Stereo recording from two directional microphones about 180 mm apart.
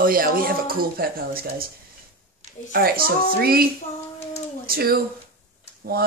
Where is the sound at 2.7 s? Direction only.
55° right (ahead or behind).